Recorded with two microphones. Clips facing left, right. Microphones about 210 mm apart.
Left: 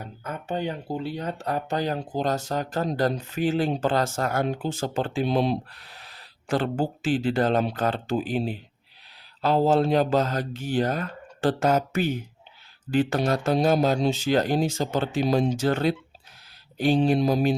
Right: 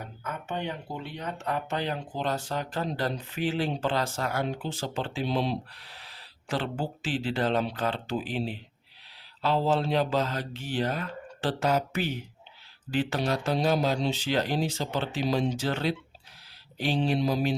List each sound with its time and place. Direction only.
0.3 s speech: 35° left (ahead or behind)